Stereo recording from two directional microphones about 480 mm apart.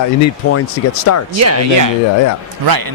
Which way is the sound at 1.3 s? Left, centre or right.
Right.